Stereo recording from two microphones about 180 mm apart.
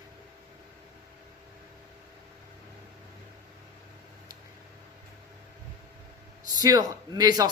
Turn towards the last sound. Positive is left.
turn(degrees=-20)  # may be behind; listen again after turning